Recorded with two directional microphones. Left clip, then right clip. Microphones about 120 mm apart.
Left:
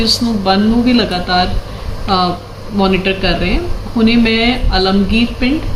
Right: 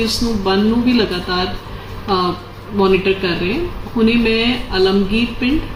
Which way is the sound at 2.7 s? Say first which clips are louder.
Even; 35° left (ahead or behind).